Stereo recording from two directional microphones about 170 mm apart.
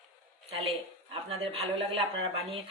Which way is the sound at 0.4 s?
35° right (ahead or behind).